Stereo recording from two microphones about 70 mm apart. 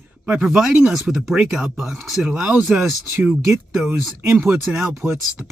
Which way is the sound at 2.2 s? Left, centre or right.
Centre.